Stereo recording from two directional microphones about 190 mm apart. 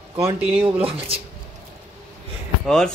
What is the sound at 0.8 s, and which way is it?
Speech, 30° right (ahead or behind).